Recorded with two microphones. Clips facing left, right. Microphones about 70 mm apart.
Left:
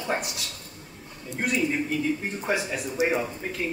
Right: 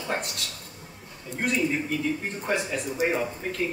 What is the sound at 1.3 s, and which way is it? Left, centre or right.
Speech, centre.